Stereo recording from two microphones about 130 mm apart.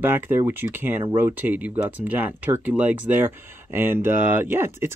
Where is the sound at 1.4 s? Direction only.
15° right (ahead or behind).